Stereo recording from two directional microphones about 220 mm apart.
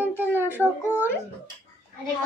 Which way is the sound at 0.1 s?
10° left (ahead or behind).